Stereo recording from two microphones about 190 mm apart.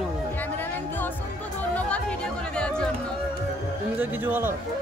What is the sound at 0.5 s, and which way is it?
A man's voice, 10° left (ahead or behind).